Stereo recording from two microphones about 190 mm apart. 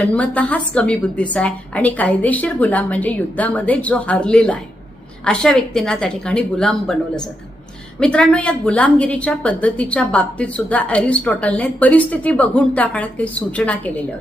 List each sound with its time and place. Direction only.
0.0 s a woman's voice: 5° left (ahead or behind)
7.9 s a woman's voice: 5° left (ahead or behind)